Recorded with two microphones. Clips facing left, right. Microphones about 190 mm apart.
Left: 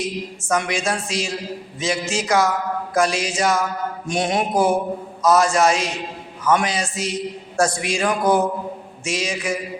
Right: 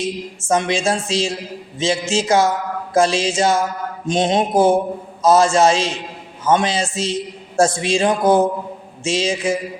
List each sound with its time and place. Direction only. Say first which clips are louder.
0.0 s a man's voice: right 2 dB; 25° right (ahead or behind)